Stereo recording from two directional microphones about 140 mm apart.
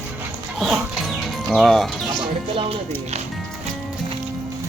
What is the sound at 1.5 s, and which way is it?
Speech, centre (ahead or behind).